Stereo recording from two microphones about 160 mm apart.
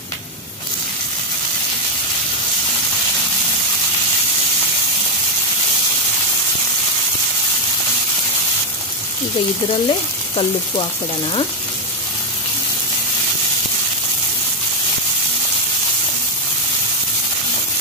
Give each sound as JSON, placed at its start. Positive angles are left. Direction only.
{"t": 9.7, "sound": "speech", "side_deg": 35}